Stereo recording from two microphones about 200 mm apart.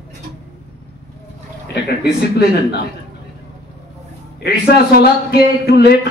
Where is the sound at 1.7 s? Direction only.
55° left (ahead or behind).